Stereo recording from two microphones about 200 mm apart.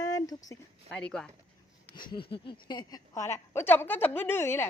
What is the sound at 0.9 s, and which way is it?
Speech, 5° left (ahead or behind).